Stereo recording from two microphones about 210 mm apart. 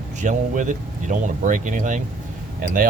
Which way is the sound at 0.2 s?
35° right (ahead or behind).